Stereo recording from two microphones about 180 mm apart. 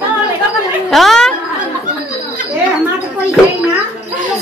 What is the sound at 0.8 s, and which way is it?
Speech, centre (ahead or behind).